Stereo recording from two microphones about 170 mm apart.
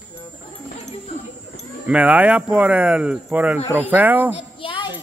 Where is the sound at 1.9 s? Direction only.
10° right (ahead or behind).